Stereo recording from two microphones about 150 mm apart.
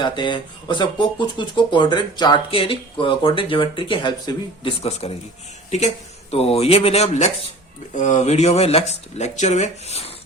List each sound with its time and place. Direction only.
0.0 s speech: 30° left (ahead or behind)
6.3 s speech: 45° left (ahead or behind)